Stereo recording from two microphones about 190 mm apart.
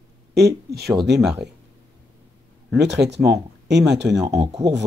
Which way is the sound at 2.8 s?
65° right (ahead or behind).